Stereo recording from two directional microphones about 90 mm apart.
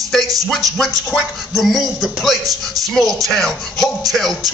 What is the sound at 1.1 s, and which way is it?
A man's voice, centre (ahead or behind).